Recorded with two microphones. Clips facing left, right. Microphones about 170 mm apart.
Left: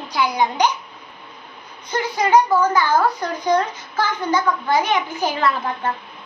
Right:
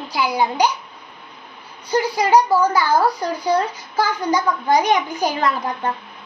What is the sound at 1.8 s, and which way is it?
A child's voice, 10° right (ahead or behind).